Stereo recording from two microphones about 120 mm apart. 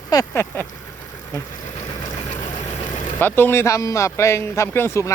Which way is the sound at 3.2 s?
20° left (ahead or behind).